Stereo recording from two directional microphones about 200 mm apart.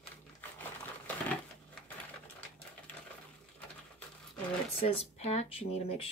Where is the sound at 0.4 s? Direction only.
10° left (ahead or behind).